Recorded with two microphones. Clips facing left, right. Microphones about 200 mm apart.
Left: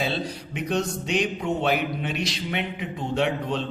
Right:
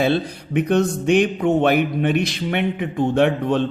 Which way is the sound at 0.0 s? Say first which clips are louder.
Right 8 dB; 55° right (ahead or behind).